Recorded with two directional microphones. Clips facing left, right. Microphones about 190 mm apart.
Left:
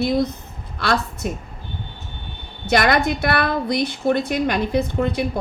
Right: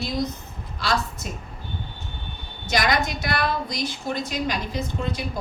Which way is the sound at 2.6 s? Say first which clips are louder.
Left 6 dB; 60° left (ahead or behind).